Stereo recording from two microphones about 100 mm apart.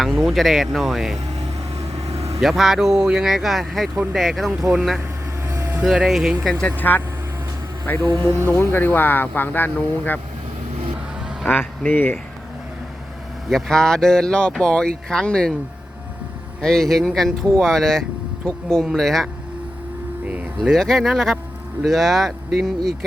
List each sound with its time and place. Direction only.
0.0 s speech: centre (ahead or behind)
2.1 s vehicle: 90° right
2.4 s speech: centre (ahead or behind); by 7.0 s 20° left (ahead or behind)
8.0 s speech: 45° right (ahead or behind)
8.3 s speech: 30° right (ahead or behind)
8.5 s speech: 25° left (ahead or behind)
11.4 s speech: 15° left (ahead or behind)
13.5 s speech: 5° left (ahead or behind)
16.6 s speech: 5° left (ahead or behind)
20.2 s speech: 15° right (ahead or behind)
20.6 s speech: 5° left (ahead or behind)